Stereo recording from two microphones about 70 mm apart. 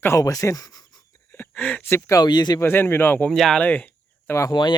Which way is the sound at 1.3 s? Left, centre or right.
Left.